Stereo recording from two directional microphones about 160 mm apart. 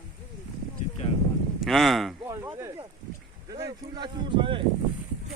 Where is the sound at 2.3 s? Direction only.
20° right (ahead or behind).